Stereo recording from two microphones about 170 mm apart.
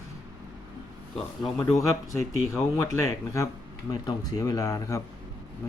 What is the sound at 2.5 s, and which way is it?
Speech, 15° left (ahead or behind).